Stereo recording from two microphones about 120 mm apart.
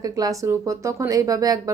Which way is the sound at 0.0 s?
30° right (ahead or behind).